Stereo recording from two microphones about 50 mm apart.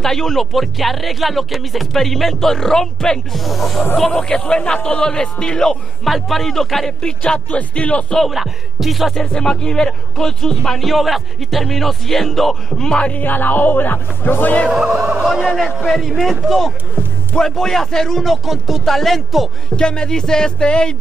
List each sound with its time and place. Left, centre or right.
0.0 s speech: centre
4.2 s speech: centre
6.0 s speech: centre
7.0 s speech: centre
8.2 s speech: centre
9.2 s speech: centre
12.8 s speech: left
13.2 s music: left
14.7 s speech: centre
15.5 s speech: centre
19.7 s speech: centre